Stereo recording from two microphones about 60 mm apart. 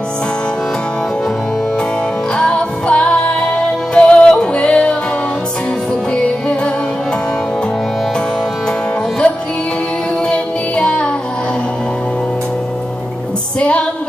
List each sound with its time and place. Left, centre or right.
2.3 s music: centre
3.9 s yodeling: centre
6.1 s music: centre
9.2 s music: centre
13.6 s music: left